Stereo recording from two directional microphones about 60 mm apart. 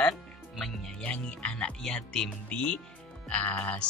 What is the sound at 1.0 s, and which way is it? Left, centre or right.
Speech, left.